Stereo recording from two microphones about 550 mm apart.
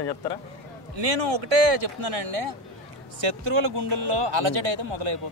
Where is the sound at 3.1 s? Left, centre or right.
Right.